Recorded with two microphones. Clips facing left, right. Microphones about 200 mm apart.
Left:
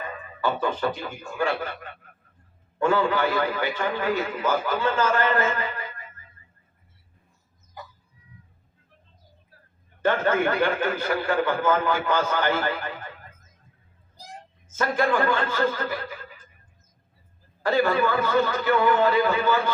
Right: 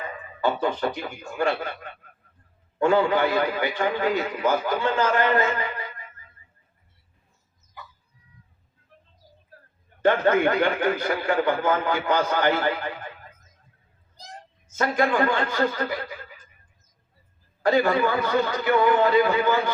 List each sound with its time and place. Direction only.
0.4 s a man's voice: 15° right (ahead or behind)
7.8 s chicken: 40° left (ahead or behind)
10.0 s a man's voice: 15° right (ahead or behind)
14.8 s a man's voice: 15° right (ahead or behind)
17.6 s a man's voice: 15° right (ahead or behind)